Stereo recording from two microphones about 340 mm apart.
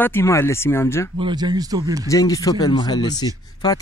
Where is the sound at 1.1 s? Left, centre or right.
Centre.